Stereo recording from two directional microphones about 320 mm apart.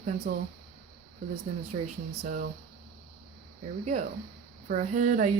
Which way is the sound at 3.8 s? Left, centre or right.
Right.